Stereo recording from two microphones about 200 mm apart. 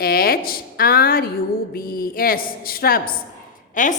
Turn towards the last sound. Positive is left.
turn(degrees=40)  # may be behind; listen again after turning